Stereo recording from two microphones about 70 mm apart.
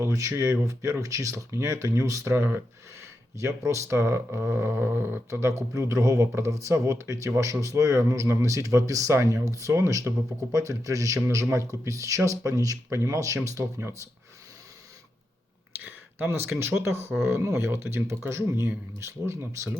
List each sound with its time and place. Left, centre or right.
0.0 s speech: right
5.3 s speech: right
15.9 s speech: right